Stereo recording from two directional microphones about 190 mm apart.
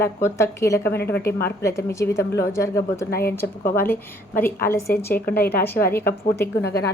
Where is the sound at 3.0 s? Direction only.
55° left (ahead or behind).